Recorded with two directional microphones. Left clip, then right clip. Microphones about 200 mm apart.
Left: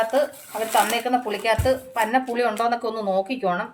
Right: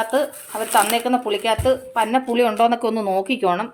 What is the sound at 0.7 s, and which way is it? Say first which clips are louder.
Speech: right 3 dB; 35° right (ahead or behind).